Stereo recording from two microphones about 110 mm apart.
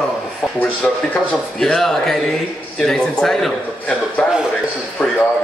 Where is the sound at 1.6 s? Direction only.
5° left (ahead or behind).